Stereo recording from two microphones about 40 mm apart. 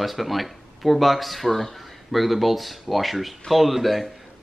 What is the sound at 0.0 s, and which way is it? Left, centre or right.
Speech, centre.